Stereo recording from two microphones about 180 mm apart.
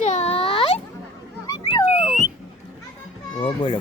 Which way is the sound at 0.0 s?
40° left (ahead or behind).